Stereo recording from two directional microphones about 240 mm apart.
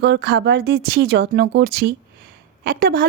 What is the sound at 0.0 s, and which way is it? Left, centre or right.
A woman's voice, right.